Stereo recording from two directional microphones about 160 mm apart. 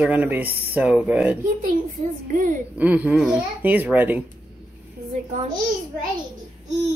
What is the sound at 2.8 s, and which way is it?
Speech, 10° right (ahead or behind).